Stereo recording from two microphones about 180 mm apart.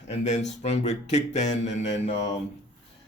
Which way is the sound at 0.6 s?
40° left (ahead or behind).